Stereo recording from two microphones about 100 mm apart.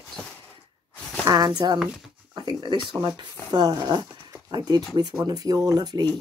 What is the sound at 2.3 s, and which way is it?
Speech, 45° right (ahead or behind).